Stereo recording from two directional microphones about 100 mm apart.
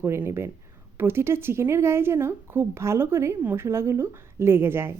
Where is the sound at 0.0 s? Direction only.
25° right (ahead or behind).